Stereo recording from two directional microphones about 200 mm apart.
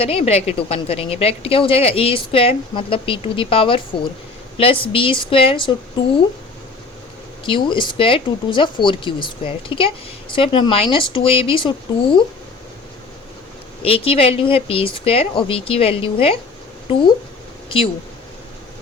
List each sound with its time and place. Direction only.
0.0 s speech: 30° left (ahead or behind)
7.4 s speech: 25° left (ahead or behind)
13.8 s speech: 30° left (ahead or behind)